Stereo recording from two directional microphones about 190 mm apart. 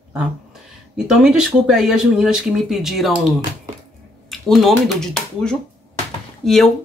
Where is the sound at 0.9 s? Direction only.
5° right (ahead or behind).